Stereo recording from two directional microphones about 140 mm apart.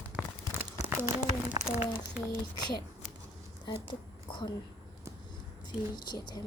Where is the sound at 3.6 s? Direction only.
35° left (ahead or behind).